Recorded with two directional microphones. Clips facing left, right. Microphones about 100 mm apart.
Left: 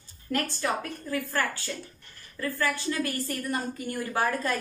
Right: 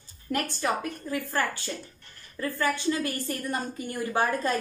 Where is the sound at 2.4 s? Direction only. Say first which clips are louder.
Right 2 dB; 20° right (ahead or behind).